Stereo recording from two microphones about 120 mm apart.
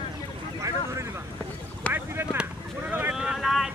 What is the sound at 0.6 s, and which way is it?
Speech, 25° right (ahead or behind).